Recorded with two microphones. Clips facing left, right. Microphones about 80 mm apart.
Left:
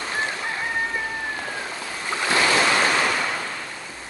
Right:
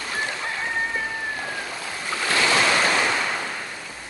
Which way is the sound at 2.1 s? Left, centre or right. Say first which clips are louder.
Left 1 dB; left.